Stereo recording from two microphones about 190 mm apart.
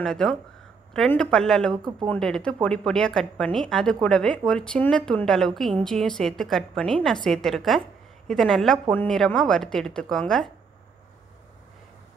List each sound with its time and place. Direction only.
0.0 s speech: centre (ahead or behind)
1.9 s speech: 20° right (ahead or behind)
2.1 s speech: 5° left (ahead or behind)